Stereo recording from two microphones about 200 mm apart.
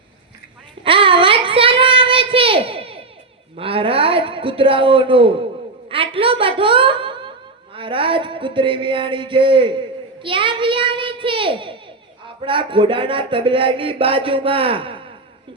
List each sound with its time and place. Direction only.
0.9 s child singing: 25° right (ahead or behind)
3.5 s a woman's voice: 25° right (ahead or behind)